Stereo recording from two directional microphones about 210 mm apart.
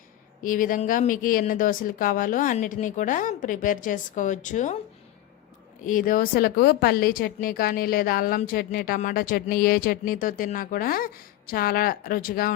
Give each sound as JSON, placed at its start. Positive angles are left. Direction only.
{"t": 0.4, "sound": "speech", "side_deg": 40}
{"t": 5.8, "sound": "a woman's voice", "side_deg": 40}